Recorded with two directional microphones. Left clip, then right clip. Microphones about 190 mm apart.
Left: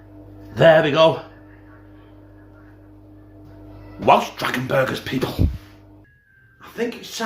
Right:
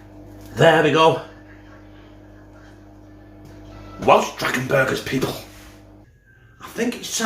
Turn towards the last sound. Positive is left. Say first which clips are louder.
# right 2 dB
turn(degrees=-5)  # may be behind; listen again after turning